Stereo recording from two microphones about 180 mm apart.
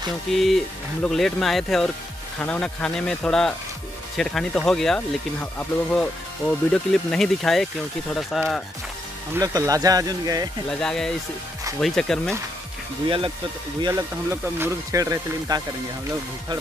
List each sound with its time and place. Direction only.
0.3 s speech: centre (ahead or behind)
9.3 s speech: 20° right (ahead or behind)
10.7 s speech: 5° left (ahead or behind)
13.7 s speech: 20° right (ahead or behind)